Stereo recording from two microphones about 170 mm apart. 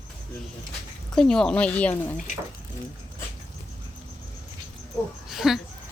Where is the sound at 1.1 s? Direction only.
5° left (ahead or behind).